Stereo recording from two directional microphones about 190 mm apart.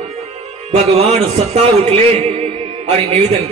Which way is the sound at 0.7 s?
35° right (ahead or behind).